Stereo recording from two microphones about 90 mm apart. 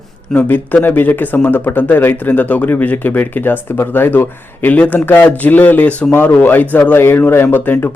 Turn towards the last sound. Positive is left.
turn(degrees=20)  # may be behind; listen again after turning